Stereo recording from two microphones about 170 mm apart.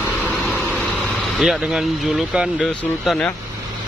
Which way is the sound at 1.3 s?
Centre (ahead or behind).